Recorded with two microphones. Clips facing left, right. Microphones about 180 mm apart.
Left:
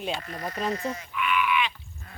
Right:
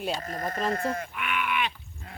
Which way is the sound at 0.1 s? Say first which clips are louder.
Right 2 dB; 40° right (ahead or behind).